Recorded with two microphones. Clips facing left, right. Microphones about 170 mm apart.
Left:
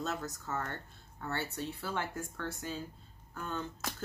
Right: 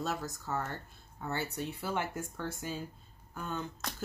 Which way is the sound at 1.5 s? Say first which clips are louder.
Right 2 dB; 20° right (ahead or behind).